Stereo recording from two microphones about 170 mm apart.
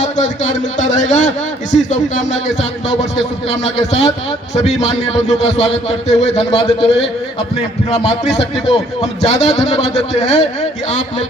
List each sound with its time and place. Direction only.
0.0 s a man's voice: 45° left (ahead or behind)